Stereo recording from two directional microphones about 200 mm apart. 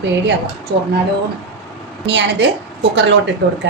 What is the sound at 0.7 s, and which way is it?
Speech, 55° right (ahead or behind).